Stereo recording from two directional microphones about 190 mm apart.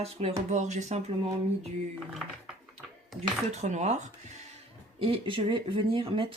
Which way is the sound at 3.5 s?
35° right (ahead or behind).